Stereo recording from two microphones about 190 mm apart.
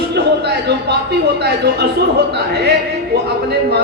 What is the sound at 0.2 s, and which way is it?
Speech, 60° right (ahead or behind).